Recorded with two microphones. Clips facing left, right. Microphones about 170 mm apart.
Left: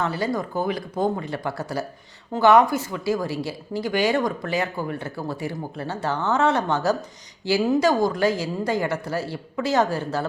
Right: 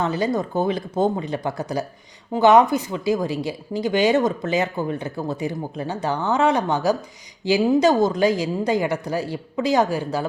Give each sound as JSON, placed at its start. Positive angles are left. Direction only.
{"t": 0.0, "sound": "speech", "side_deg": -20}